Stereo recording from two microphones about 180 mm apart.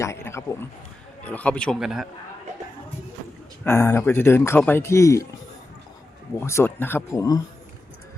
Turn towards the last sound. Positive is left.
turn(degrees=20)  # may be behind; listen again after turning